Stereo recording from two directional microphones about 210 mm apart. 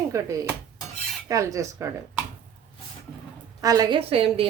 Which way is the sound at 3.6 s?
15° right (ahead or behind).